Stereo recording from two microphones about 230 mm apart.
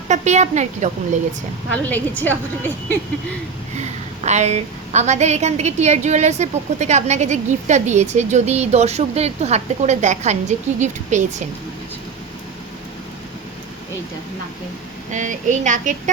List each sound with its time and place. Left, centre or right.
0.1 s speech: right
1.7 s a woman's voice: centre
3.8 s a woman's voice: right
15.1 s speech: right